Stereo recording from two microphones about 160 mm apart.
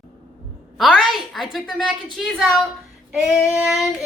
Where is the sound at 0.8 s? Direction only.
Centre (ahead or behind).